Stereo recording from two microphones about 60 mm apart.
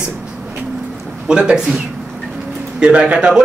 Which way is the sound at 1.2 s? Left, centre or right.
Centre.